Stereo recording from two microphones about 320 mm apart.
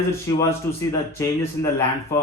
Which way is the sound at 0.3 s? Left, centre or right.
Centre.